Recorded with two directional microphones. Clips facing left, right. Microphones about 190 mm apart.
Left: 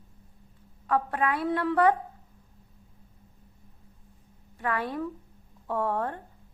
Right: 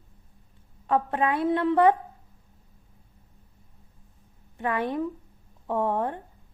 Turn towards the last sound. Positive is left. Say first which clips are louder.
# right 3 dB
turn(degrees=-20)  # may be behind; listen again after turning